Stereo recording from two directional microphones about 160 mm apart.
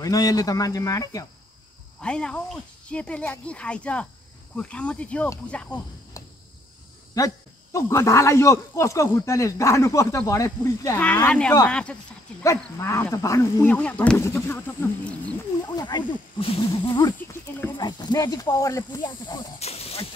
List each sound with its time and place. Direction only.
0.0 s speech: 20° left (ahead or behind)
2.0 s speech: 5° left (ahead or behind)
6.2 s cricket: 20° left (ahead or behind)
7.2 s speech: 20° left (ahead or behind)
11.0 s speech: 10° left (ahead or behind)
12.7 s speech: 15° left (ahead or behind)
15.7 s speech: 30° left (ahead or behind)
19.6 s speech: 40° left (ahead or behind)